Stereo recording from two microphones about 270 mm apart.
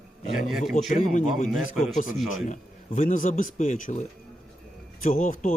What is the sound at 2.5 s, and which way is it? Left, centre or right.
Speech, left.